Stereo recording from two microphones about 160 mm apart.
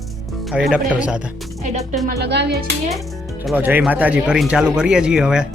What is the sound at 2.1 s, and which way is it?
Speech, 85° right.